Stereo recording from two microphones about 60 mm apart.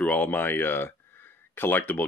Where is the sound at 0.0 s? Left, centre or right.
Left.